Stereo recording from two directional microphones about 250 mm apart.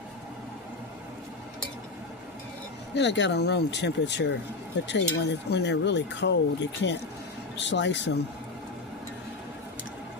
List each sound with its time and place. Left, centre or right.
2.9 s speech: left